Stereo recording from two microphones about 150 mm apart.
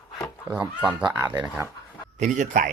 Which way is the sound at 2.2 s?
55° right (ahead or behind).